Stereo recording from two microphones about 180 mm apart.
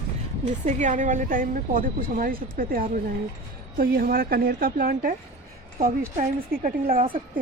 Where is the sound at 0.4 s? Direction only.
45° right (ahead or behind).